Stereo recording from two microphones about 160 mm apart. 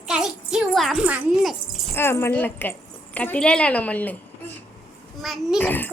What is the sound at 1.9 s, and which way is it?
A woman's voice, 15° left (ahead or behind).